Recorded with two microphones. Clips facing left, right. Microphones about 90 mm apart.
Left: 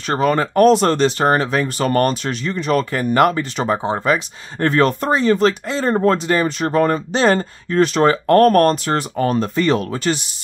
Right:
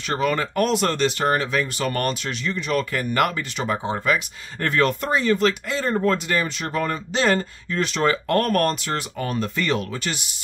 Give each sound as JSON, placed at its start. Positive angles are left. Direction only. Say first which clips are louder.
{"t": 0.1, "sound": "speech", "louder": "left 6 dB", "side_deg": 35}